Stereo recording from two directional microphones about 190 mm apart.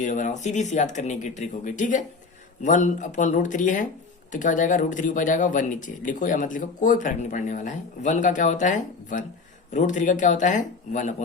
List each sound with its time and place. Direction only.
0.0 s a man's voice: 40° left (ahead or behind)